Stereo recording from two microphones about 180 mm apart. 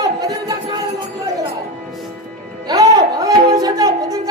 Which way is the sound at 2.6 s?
20° right (ahead or behind).